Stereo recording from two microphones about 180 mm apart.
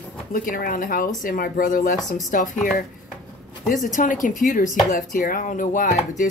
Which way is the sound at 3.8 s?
50° left (ahead or behind).